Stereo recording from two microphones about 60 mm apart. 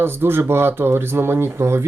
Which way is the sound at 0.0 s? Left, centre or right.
Right.